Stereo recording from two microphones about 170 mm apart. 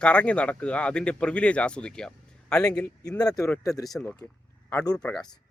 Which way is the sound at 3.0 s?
20° left (ahead or behind).